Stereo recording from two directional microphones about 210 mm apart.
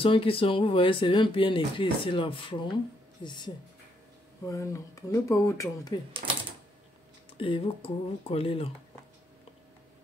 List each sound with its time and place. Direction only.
0.0 s speech: 25° left (ahead or behind)
6.2 s typewriter: 40° right (ahead or behind)
7.3 s speech: 25° left (ahead or behind)